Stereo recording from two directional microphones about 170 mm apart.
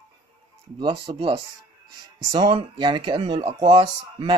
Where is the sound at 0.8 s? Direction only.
30° right (ahead or behind).